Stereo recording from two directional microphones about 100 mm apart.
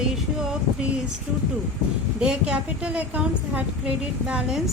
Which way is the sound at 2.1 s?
10° right (ahead or behind).